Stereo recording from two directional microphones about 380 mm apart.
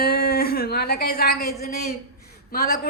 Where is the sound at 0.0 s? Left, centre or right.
Left.